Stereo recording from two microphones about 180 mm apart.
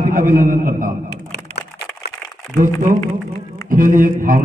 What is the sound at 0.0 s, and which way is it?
Speech, 50° right (ahead or behind).